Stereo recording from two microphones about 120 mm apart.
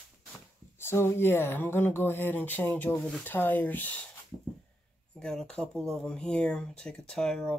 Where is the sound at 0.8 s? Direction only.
20° left (ahead or behind).